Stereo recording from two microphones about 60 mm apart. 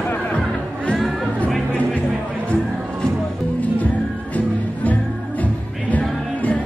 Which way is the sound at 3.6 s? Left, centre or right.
Left.